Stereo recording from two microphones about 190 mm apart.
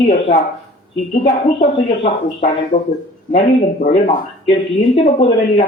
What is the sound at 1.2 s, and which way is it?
Speech, 30° left (ahead or behind).